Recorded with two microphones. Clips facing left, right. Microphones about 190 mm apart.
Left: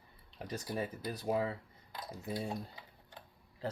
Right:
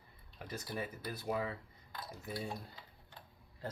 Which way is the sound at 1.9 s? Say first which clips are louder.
Left 3 dB; 20° left (ahead or behind).